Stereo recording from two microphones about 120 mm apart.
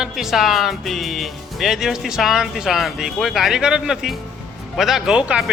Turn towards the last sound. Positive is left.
turn(degrees=-5)  # may be behind; listen again after turning